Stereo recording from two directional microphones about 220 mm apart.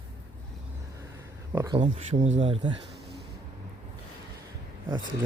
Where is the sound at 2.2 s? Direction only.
30° right (ahead or behind).